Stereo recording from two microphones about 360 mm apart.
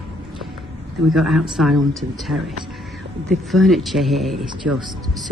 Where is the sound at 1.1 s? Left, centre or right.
Centre.